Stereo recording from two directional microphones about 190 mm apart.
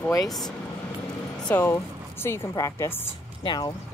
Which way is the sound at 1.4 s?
10° left (ahead or behind).